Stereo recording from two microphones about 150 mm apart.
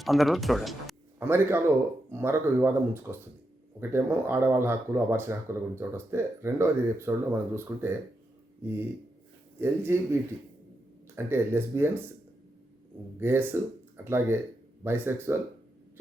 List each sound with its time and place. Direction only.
0.0 s speech: centre (ahead or behind)
1.2 s speech: 15° right (ahead or behind)
9.6 s speech: 15° right (ahead or behind)
13.1 s speech: 15° right (ahead or behind)